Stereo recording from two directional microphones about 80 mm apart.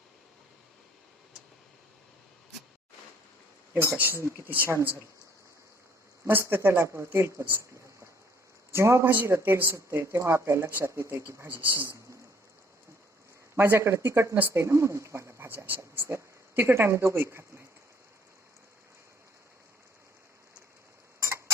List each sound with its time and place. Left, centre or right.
3.8 s speech: right
6.2 s speech: right
8.7 s speech: right
11.4 s speech: right
13.6 s speech: right
14.6 s speech: right
21.2 s tick-tock: right